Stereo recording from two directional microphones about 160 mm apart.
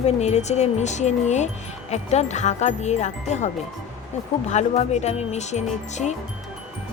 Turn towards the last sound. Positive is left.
turn(degrees=45)  # may be behind; listen again after turning